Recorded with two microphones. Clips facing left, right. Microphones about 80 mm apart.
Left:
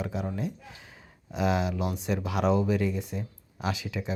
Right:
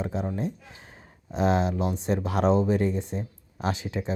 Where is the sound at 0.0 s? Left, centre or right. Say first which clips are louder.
Right 3 dB; right.